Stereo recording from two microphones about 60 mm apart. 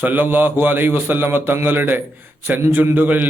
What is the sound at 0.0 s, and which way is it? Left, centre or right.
Speech, right.